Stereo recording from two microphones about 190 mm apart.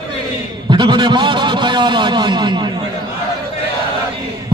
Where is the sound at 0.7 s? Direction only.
25° right (ahead or behind).